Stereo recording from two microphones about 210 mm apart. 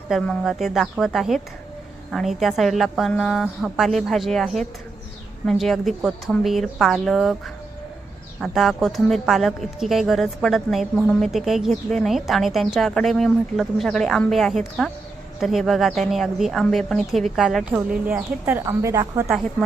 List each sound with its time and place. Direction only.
0.1 s a woman's voice: centre (ahead or behind)
8.4 s a woman's voice: centre (ahead or behind)